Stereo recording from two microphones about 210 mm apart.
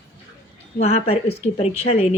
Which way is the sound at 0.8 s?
30° left (ahead or behind).